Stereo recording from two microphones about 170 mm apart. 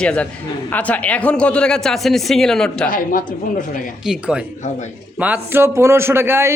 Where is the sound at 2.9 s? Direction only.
55° left (ahead or behind).